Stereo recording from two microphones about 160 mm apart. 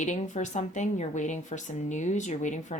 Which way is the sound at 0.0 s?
50° left (ahead or behind).